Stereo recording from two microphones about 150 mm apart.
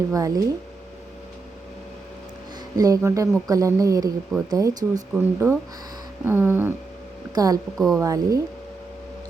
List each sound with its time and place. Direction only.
0.1 s a woman's voice: 20° right (ahead or behind)
2.7 s a woman's voice: 25° right (ahead or behind)
5.1 s a sound: 15° right (ahead or behind)
7.3 s a woman's voice: 25° right (ahead or behind)
7.8 s speech: centre (ahead or behind)
8.0 s a woman's voice: 20° right (ahead or behind)